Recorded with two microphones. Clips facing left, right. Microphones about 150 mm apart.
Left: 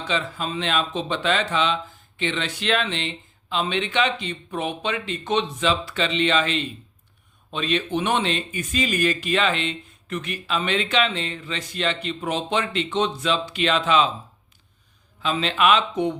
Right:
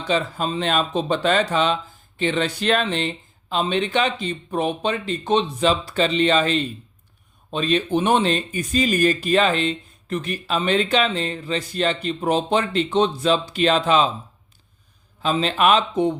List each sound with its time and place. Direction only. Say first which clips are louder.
0.1 s speech: right 5 dB; 40° right (ahead or behind)
15.2 s speech: right 2 dB; 40° right (ahead or behind)